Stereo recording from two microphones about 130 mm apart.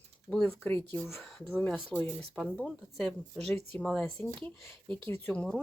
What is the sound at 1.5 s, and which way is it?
A woman's voice, 15° left (ahead or behind).